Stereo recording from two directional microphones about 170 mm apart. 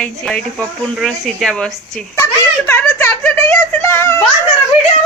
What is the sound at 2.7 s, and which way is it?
A child's voice, 15° left (ahead or behind).